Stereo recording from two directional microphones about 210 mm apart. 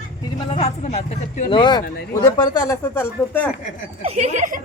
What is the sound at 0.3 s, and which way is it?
Speech, 30° left (ahead or behind).